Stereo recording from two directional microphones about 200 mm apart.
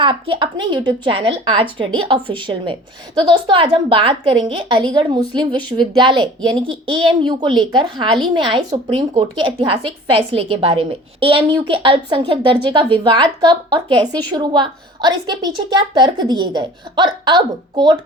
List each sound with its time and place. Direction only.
0.0 s speech: 25° right (ahead or behind)